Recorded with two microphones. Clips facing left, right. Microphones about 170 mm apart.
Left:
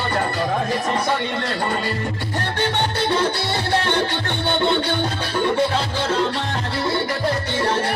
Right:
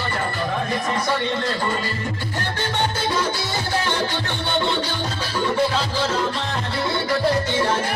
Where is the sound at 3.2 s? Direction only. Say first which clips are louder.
Left 3 dB; 65° left (ahead or behind).